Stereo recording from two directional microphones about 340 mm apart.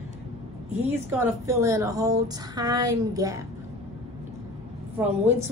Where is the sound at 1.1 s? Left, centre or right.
Centre.